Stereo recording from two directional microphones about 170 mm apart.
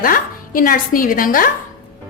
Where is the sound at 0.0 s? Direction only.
55° left (ahead or behind).